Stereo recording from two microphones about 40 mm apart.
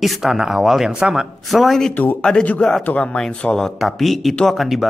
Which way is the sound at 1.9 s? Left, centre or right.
Left.